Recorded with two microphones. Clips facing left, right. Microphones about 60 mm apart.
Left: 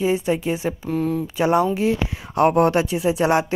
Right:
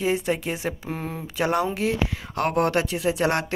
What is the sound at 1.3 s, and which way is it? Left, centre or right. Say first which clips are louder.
Speech: left 4 dB; centre.